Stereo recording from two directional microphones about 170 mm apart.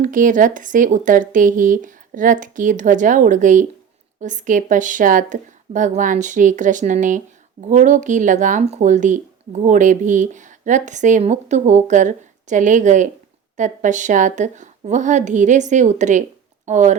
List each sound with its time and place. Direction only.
0.0 s speech: 50° right (ahead or behind)